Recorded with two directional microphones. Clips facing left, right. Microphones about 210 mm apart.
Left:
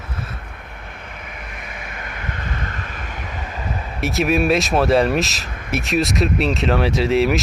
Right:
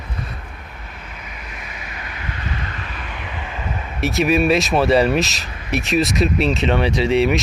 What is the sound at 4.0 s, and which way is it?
Speech, centre (ahead or behind).